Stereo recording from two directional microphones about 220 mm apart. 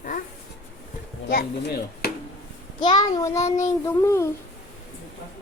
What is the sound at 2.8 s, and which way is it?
Child singing, 20° left (ahead or behind).